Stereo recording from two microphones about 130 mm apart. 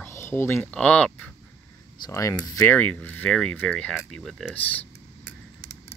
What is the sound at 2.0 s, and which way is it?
Speech, 25° left (ahead or behind).